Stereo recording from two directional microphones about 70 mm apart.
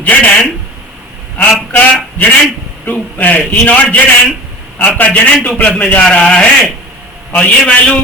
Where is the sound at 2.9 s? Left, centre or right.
Left.